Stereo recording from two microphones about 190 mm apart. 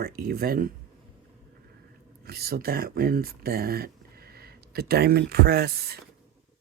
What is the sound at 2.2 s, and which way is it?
Speech, 55° right (ahead or behind).